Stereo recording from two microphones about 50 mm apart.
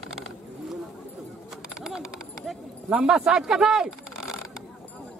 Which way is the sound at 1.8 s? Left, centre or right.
Centre.